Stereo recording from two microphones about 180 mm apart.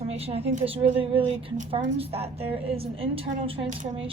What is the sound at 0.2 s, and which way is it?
Speech, 35° right (ahead or behind).